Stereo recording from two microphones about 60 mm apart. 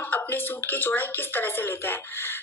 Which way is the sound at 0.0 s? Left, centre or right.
Left.